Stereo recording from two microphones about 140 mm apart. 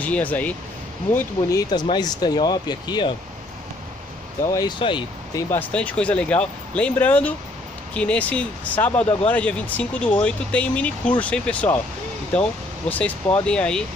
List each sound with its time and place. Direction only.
0.0 s speech: 10° left (ahead or behind)
1.1 s speech: 25° left (ahead or behind)
4.5 s speech: 30° left (ahead or behind)
5.5 s speech: 10° left (ahead or behind)